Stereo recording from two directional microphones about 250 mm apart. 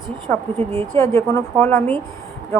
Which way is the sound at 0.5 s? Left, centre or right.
Right.